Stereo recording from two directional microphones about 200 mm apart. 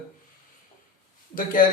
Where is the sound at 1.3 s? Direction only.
40° left (ahead or behind).